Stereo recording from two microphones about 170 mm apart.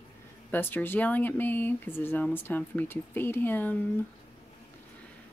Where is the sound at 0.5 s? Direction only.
10° left (ahead or behind).